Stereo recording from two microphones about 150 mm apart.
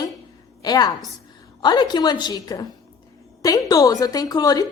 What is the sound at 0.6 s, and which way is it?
A woman's voice, 25° left (ahead or behind).